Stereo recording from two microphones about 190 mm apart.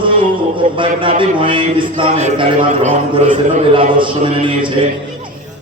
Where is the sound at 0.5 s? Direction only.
25° right (ahead or behind).